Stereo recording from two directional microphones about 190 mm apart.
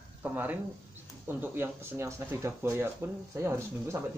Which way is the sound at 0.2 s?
10° right (ahead or behind).